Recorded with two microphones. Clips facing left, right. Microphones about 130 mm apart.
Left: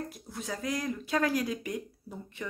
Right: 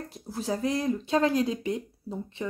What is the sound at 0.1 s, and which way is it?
Speech, 30° right (ahead or behind).